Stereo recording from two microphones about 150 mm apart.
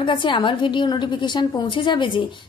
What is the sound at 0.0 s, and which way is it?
A woman's voice, 30° left (ahead or behind).